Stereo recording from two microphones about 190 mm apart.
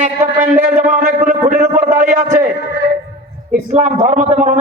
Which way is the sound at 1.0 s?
40° right (ahead or behind).